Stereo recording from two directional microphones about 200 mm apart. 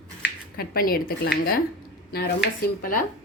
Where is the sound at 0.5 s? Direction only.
50° left (ahead or behind).